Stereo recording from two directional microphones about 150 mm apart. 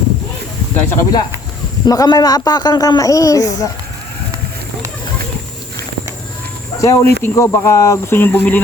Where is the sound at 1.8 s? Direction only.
25° left (ahead or behind).